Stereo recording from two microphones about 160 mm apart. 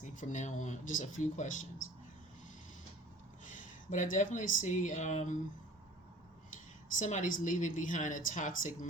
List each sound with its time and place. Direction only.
0.0 s speech: 50° left (ahead or behind)
3.8 s speech: 50° left (ahead or behind)
7.0 s speech: 50° left (ahead or behind)